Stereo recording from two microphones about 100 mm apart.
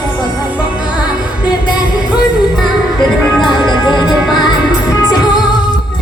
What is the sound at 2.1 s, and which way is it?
Music, 5° right (ahead or behind).